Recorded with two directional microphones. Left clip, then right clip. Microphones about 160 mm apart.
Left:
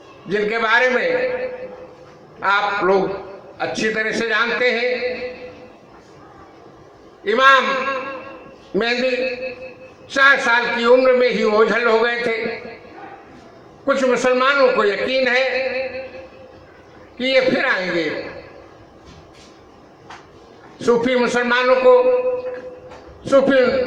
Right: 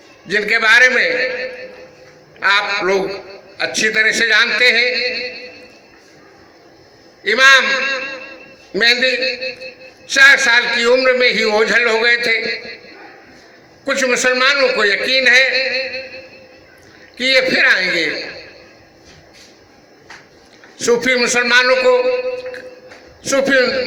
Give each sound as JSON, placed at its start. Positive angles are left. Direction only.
{"t": 0.3, "sound": "a man's voice", "side_deg": -10}
{"t": 2.4, "sound": "a man's voice", "side_deg": -15}
{"t": 7.3, "sound": "a man's voice", "side_deg": -10}
{"t": 13.8, "sound": "a man's voice", "side_deg": 0}
{"t": 17.2, "sound": "a man's voice", "side_deg": -20}
{"t": 20.7, "sound": "a man's voice", "side_deg": -15}
{"t": 23.2, "sound": "a man's voice", "side_deg": -10}